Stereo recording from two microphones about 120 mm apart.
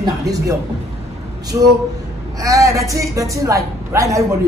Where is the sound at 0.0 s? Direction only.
30° right (ahead or behind).